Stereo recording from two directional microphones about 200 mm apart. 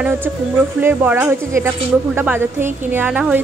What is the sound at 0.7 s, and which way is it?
Speech, 10° right (ahead or behind).